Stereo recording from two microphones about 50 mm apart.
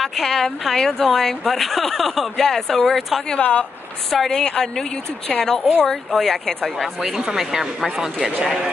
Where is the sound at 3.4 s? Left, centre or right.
Left.